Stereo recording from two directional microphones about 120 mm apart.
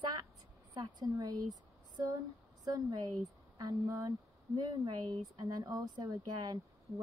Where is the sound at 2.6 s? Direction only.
30° right (ahead or behind).